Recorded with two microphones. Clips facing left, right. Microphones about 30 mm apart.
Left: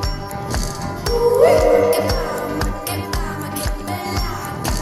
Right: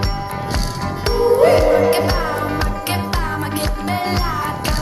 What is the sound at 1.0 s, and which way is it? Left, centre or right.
Music, right.